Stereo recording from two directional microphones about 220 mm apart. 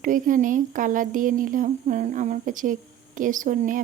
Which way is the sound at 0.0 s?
35° right (ahead or behind).